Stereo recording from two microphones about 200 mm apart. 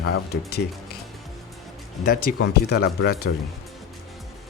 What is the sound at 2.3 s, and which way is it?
Speech, 60° left (ahead or behind).